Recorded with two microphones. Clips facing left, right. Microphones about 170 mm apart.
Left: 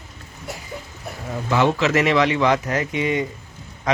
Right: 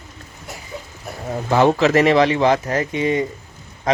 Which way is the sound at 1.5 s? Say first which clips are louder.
Right 4 dB; 40° right (ahead or behind).